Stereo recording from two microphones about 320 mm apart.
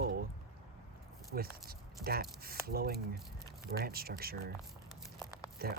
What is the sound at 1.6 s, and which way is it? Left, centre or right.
Speech, right.